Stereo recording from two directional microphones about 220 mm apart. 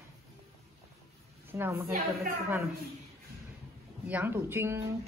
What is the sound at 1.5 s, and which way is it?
Speech, 10° right (ahead or behind).